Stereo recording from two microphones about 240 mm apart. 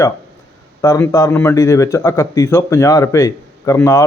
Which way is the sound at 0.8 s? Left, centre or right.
Centre.